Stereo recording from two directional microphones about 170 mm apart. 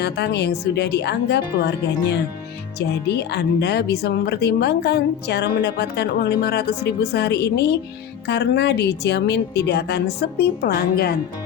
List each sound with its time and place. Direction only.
0.0 s speech: 75° left (ahead or behind)